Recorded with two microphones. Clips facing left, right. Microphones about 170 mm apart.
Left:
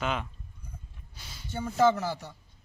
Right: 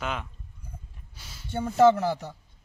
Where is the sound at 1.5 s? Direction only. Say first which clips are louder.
Right 5 dB; 55° right (ahead or behind).